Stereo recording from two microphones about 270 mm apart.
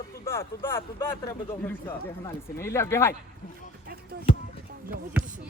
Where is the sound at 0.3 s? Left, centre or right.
Centre.